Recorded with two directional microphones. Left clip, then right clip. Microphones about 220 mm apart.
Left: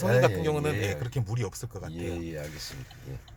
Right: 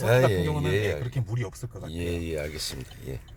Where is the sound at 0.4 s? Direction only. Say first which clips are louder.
Right 1 dB; 35° left (ahead or behind).